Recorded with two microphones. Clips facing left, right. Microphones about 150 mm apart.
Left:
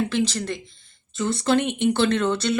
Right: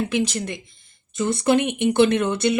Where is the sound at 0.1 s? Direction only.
15° right (ahead or behind).